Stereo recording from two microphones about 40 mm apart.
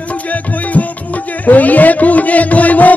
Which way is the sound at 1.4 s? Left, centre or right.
Left.